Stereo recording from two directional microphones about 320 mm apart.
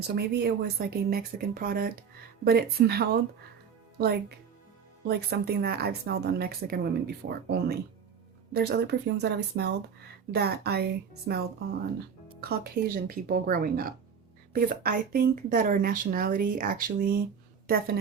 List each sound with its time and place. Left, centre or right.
0.1 s speech: right
5.0 s speech: right